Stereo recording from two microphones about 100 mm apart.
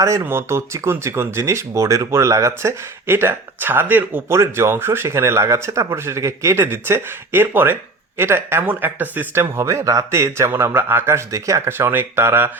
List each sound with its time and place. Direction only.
0.0 s speech: 30° right (ahead or behind)